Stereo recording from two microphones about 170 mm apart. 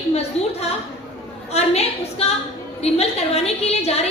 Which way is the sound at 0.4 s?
40° left (ahead or behind).